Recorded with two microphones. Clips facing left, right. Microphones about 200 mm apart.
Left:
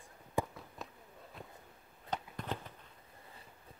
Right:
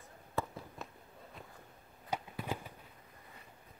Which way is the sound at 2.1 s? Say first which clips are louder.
Right 1 dB; 10° right (ahead or behind).